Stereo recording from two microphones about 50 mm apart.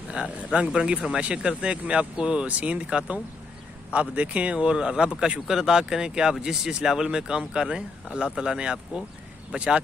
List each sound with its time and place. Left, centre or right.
0.1 s speech: right